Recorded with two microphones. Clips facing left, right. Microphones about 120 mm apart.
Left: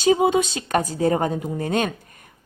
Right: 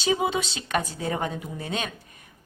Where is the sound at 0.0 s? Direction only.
45° left (ahead or behind).